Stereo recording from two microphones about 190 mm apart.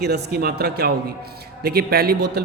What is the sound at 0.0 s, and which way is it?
A woman's voice, 60° right (ahead or behind).